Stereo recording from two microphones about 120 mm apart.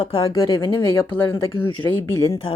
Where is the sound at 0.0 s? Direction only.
50° left (ahead or behind).